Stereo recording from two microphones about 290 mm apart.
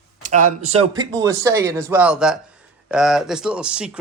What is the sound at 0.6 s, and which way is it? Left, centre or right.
A man's voice, right.